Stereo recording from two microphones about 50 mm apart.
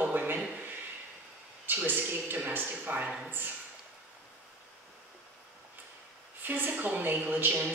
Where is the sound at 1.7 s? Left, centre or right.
Right.